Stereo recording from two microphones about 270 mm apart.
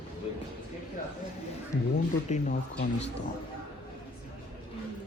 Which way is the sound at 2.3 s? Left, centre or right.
Left.